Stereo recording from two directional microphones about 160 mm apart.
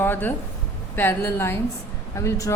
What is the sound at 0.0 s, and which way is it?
A woman's voice, 10° left (ahead or behind).